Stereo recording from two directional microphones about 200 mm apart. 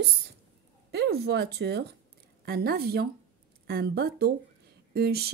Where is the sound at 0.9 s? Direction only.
55° right (ahead or behind).